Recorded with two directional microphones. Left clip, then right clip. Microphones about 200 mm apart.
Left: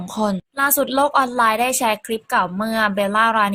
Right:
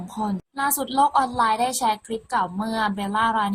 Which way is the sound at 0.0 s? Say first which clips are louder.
Left 6 dB; 30° left (ahead or behind).